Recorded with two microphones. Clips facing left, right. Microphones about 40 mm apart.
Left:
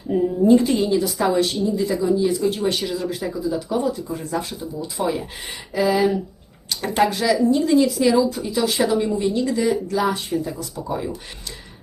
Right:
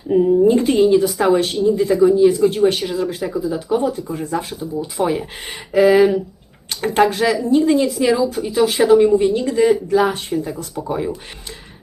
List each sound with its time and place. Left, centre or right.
0.1 s a sound: right
0.5 s speech: right
4.3 s speech: right
4.8 s speech: right
7.9 s speech: right
9.1 s speech: right
10.8 s speech: right